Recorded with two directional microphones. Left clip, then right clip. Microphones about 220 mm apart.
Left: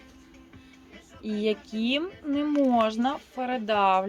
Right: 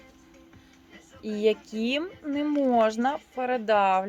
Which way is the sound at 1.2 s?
50° right (ahead or behind).